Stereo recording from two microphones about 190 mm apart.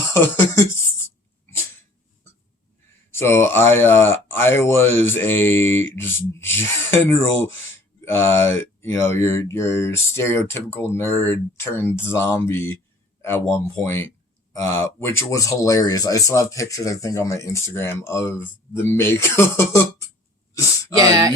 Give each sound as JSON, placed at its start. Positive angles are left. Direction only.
{"t": 0.1, "sound": "speech", "side_deg": 15}
{"t": 3.1, "sound": "speech", "side_deg": 10}
{"t": 13.7, "sound": "speech", "side_deg": 15}
{"t": 21.0, "sound": "speech", "side_deg": -20}